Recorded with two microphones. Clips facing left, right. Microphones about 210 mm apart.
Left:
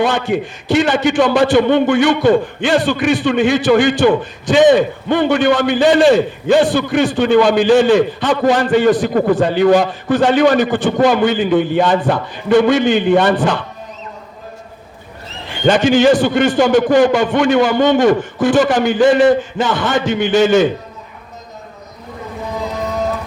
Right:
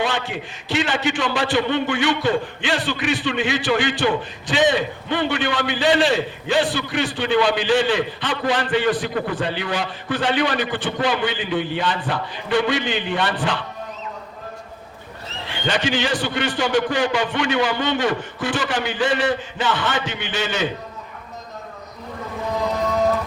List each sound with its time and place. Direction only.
0.0 s a man's voice: 50° left (ahead or behind)
15.4 s a man's voice: 45° left (ahead or behind)